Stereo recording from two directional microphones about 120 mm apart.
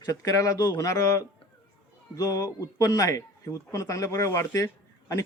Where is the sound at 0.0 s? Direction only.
30° left (ahead or behind).